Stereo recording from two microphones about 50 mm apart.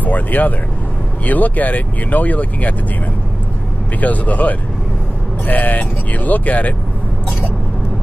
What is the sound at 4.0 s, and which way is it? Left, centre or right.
Speech, left.